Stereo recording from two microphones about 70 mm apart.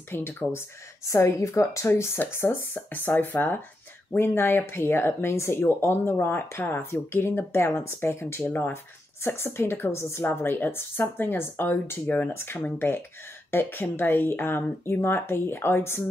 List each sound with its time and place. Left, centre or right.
0.1 s speech: left